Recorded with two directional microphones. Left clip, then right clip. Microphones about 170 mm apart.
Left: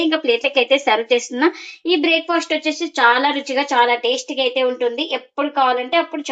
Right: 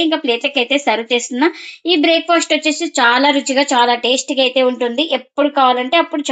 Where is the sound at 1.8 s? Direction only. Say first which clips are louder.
Right 4 dB; 45° right (ahead or behind).